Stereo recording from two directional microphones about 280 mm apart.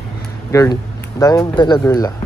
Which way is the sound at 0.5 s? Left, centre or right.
Centre.